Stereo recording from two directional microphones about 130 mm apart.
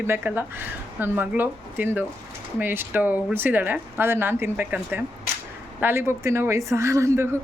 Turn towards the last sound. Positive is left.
turn(degrees=-20)  # may be behind; listen again after turning